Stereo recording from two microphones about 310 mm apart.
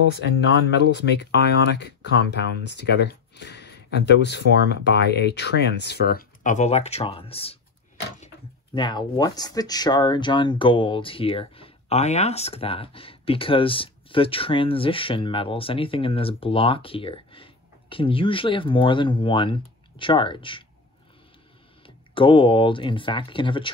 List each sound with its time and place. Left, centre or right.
0.1 s speech: left; by 7.5 s centre
8.7 s speech: centre
21.8 s speech: centre